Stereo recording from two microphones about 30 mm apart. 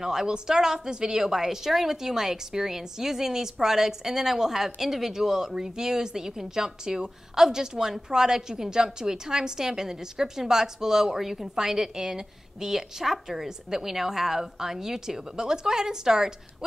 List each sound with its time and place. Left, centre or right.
0.0 s a woman's voice: centre